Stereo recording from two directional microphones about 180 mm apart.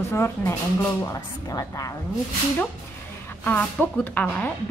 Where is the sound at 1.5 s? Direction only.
20° left (ahead or behind).